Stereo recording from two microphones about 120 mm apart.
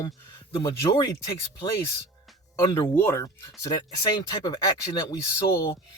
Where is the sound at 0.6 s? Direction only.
30° left (ahead or behind).